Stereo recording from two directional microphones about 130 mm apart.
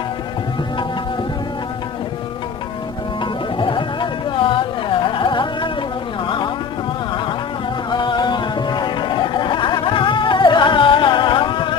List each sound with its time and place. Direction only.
3.6 s carnatic music: 40° left (ahead or behind)
6.2 s music: 40° left (ahead or behind)
7.9 s music: 35° left (ahead or behind)